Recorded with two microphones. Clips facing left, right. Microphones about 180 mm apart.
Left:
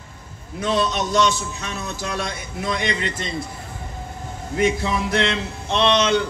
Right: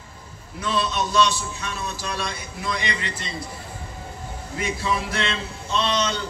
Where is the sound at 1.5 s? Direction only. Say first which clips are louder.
Left 1 dB; 65° left (ahead or behind).